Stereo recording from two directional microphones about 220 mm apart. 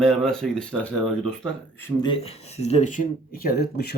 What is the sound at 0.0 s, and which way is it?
Speech, centre (ahead or behind).